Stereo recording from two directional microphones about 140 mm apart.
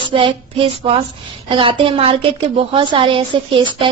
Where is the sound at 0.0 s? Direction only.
40° right (ahead or behind).